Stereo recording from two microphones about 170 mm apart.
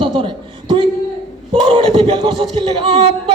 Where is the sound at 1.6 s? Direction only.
30° right (ahead or behind).